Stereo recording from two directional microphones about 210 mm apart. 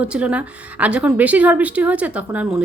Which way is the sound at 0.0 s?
5° right (ahead or behind).